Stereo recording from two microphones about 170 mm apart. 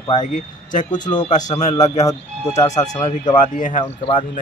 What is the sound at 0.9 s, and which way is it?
Speech, 25° left (ahead or behind).